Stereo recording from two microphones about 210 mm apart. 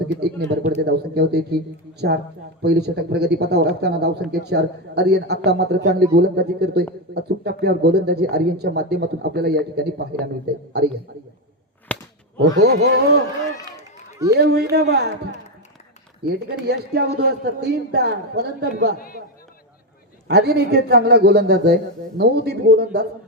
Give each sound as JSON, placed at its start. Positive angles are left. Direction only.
{"t": 0.1, "sound": "speech", "side_deg": -50}
{"t": 11.9, "sound": "whip", "side_deg": 5}
{"t": 12.4, "sound": "speech", "side_deg": -55}
{"t": 14.3, "sound": "speech", "side_deg": -50}
{"t": 16.2, "sound": "speech", "side_deg": -50}
{"t": 18.9, "sound": "speech", "side_deg": 45}
{"t": 20.2, "sound": "speech", "side_deg": -50}